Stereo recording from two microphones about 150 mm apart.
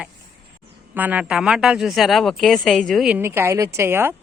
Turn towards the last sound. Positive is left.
turn(degrees=-15)  # may be behind; listen again after turning